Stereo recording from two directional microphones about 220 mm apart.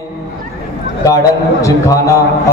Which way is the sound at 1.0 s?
15° left (ahead or behind).